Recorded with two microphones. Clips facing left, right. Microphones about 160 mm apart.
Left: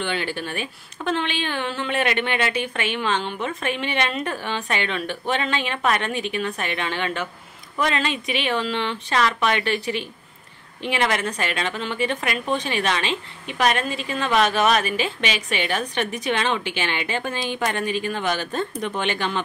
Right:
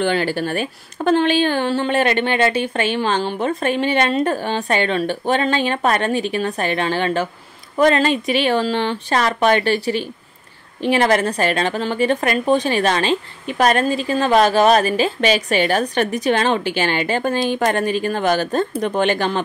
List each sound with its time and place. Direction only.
0.0 s a woman's voice: 40° right (ahead or behind)